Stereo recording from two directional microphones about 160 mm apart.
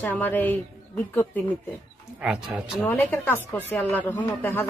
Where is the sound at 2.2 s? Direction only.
5° right (ahead or behind).